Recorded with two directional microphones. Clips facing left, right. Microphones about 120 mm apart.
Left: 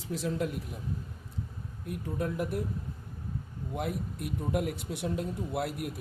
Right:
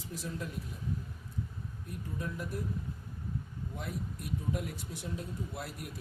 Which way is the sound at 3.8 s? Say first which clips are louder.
Left 7 dB; 60° left (ahead or behind).